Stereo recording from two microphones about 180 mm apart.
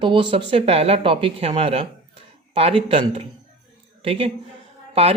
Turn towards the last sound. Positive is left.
turn(degrees=-35)  # may be behind; listen again after turning